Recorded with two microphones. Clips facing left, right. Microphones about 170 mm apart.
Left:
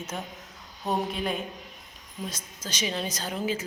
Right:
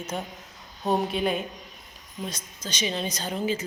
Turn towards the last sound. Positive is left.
turn(degrees=5)  # may be behind; listen again after turning